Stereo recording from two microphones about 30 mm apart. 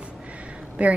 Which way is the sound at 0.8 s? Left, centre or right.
Right.